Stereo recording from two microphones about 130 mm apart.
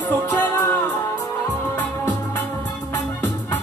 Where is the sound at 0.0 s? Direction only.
10° left (ahead or behind).